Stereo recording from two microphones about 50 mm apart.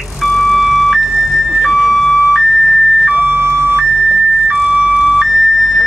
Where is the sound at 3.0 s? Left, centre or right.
Right.